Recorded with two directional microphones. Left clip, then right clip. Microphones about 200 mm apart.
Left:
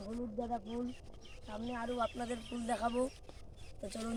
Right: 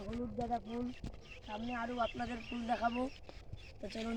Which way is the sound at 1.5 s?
25° left (ahead or behind).